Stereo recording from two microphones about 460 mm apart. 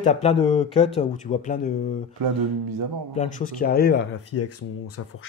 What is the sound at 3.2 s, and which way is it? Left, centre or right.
Speech, centre.